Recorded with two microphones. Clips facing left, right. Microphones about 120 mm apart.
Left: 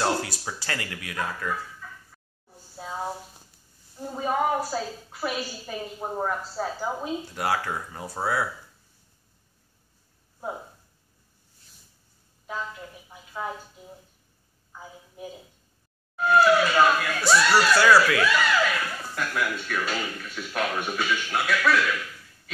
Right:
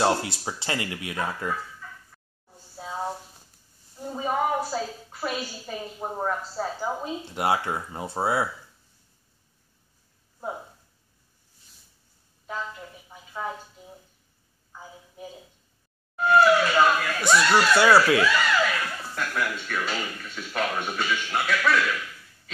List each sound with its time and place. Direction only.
0.0 s speech: 25° right (ahead or behind)
1.8 s a sound: 5° left (ahead or behind)
4.1 s a woman's voice: centre (ahead or behind)
7.3 s speech: 20° right (ahead or behind)
13.1 s a sound: centre (ahead or behind)
16.2 s speech: centre (ahead or behind)
17.7 s speech: 25° right (ahead or behind)
18.2 s speech: centre (ahead or behind)